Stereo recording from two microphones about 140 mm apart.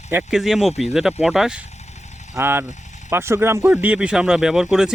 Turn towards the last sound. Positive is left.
turn(degrees=-5)  # may be behind; listen again after turning